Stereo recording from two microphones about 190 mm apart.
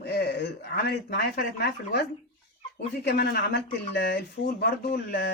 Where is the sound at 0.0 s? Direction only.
55° left (ahead or behind).